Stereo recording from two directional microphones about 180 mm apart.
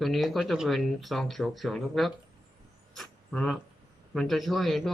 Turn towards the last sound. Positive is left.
turn(degrees=0)  # may be behind; listen again after turning